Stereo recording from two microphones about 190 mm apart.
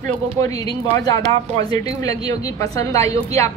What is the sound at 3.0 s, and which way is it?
Speech, 35° right (ahead or behind).